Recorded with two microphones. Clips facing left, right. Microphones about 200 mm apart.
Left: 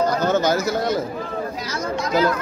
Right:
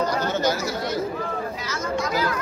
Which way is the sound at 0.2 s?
50° left (ahead or behind).